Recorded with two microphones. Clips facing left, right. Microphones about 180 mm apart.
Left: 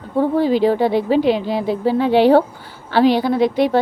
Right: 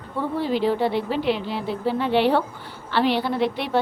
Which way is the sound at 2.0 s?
90° left.